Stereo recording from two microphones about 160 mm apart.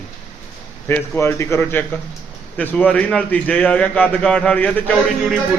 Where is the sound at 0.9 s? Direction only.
15° left (ahead or behind).